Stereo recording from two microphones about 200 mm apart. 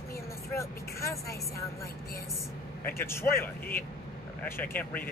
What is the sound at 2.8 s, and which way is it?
Speech, 10° left (ahead or behind).